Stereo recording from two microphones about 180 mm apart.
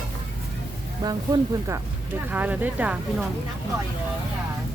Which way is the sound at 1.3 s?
20° right (ahead or behind).